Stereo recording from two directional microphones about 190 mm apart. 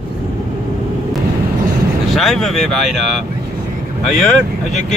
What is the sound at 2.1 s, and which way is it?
Speech, centre (ahead or behind).